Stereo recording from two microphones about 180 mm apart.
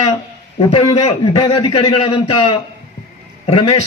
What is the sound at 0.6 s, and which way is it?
A man's voice, 30° left (ahead or behind).